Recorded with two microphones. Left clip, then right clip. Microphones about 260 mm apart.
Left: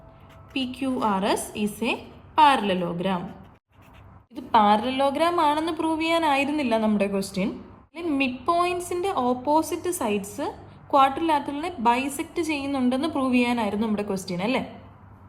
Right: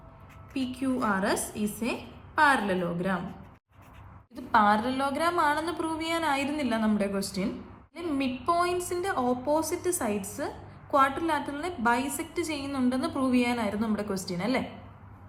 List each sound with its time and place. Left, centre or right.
1.7 s a woman's voice: left
4.4 s a woman's voice: left